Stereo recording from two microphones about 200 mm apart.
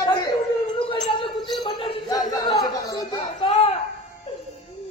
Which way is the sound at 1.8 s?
20° left (ahead or behind).